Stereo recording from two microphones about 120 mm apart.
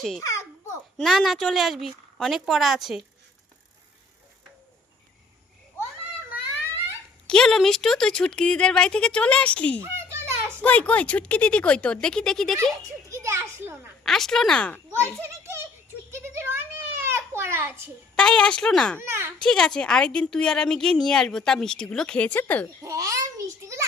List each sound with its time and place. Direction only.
0.2 s a sound: 25° left (ahead or behind)
0.9 s a woman's voice: centre (ahead or behind)
7.3 s speech: 5° left (ahead or behind)
9.8 s a sound: 20° right (ahead or behind)
10.6 s speech: 10° left (ahead or behind)
13.1 s children playing: 25° right (ahead or behind)
14.0 s a woman's voice: 5° left (ahead or behind)
15.0 s a child's voice: 20° right (ahead or behind)
16.1 s a sound: 20° right (ahead or behind)
18.2 s speech: 5° left (ahead or behind)
18.9 s a child's voice: 20° right (ahead or behind)
19.4 s a woman's voice: 5° left (ahead or behind)
22.8 s a sound: 25° right (ahead or behind)